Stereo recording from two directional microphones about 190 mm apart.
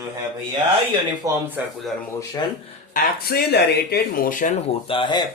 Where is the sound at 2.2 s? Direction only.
20° left (ahead or behind).